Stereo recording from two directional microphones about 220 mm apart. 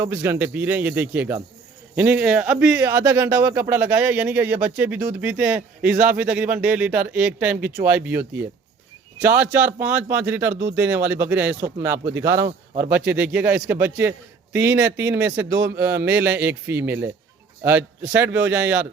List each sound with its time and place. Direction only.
0.0 s a man's voice: 10° right (ahead or behind)
10.5 s speech: 25° right (ahead or behind)
10.8 s a man's voice: 10° right (ahead or behind)